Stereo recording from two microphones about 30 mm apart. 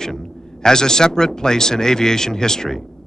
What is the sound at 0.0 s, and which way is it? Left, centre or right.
A man's voice, left.